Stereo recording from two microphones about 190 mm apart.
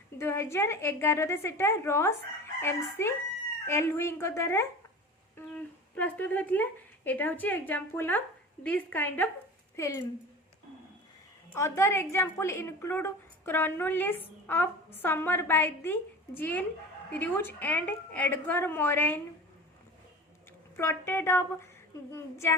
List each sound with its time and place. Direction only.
0.2 s a woman's voice: 15° left (ahead or behind)
11.5 s a woman's voice: 15° left (ahead or behind)
20.7 s a woman's voice: 15° left (ahead or behind)